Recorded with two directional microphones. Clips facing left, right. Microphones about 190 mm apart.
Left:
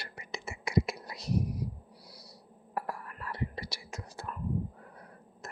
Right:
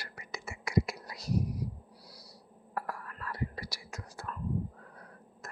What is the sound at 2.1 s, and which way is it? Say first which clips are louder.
Owl: left 1 dB; 25° left (ahead or behind).